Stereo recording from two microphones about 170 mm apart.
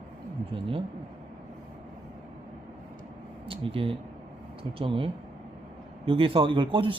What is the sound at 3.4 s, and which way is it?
Speech, 35° right (ahead or behind).